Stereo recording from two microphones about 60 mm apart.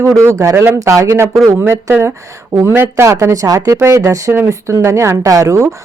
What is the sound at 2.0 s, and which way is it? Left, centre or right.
Speech, right.